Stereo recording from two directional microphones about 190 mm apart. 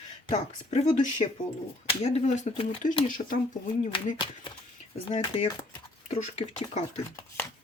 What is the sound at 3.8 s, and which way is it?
Speech, 30° left (ahead or behind).